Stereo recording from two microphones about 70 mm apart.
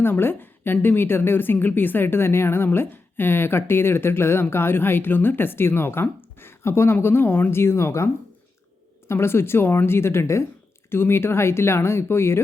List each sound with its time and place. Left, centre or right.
0.0 s speech: left